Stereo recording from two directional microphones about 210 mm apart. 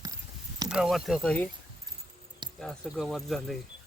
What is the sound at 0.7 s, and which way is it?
Speech, centre (ahead or behind).